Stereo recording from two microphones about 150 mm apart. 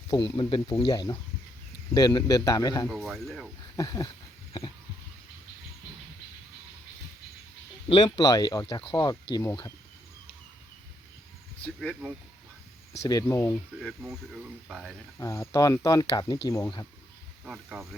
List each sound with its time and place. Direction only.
0.1 s speech: 35° left (ahead or behind)
2.9 s speech: centre (ahead or behind)
3.8 s speech: 25° left (ahead or behind)
7.9 s speech: 30° left (ahead or behind)
11.6 s speech: 5° left (ahead or behind)
13.1 s speech: 20° left (ahead or behind)
14.1 s speech: 5° right (ahead or behind)
15.2 s speech: 20° left (ahead or behind)
17.4 s speech: 5° right (ahead or behind)